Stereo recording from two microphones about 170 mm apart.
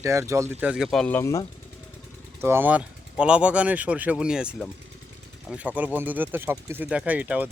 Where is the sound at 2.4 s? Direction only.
15° right (ahead or behind).